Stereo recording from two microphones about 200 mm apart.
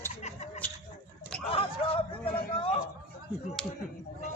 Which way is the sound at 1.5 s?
30° left (ahead or behind).